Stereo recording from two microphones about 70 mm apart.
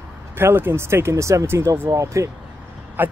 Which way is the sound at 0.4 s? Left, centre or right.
Right.